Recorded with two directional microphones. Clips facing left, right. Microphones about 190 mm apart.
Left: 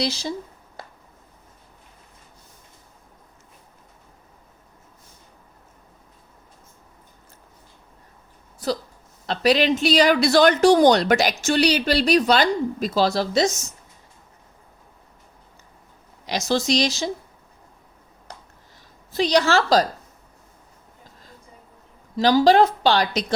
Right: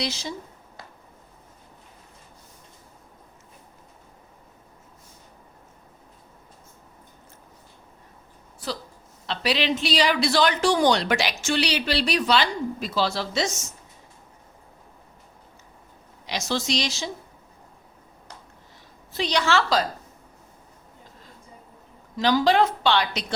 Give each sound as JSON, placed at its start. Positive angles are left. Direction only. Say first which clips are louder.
{"t": 0.0, "sound": "speech", "louder": "left 5 dB", "side_deg": 35}
{"t": 8.6, "sound": "speech", "louder": "left 7 dB", "side_deg": 40}
{"t": 16.2, "sound": "speech", "louder": "left 5 dB", "side_deg": 40}
{"t": 19.1, "sound": "speech", "louder": "left 5 dB", "side_deg": 40}
{"t": 22.2, "sound": "speech", "louder": "left 4 dB", "side_deg": 35}